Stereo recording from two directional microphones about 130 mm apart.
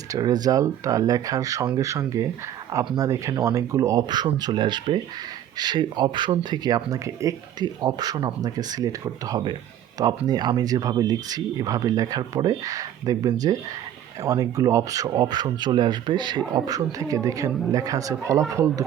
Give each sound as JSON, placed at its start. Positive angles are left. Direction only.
{"t": 0.1, "sound": "speech", "side_deg": -30}